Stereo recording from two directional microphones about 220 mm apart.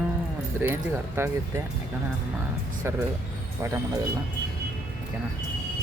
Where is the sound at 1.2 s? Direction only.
10° right (ahead or behind).